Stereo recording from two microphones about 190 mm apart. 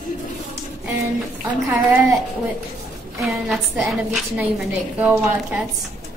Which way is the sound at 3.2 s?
Centre (ahead or behind).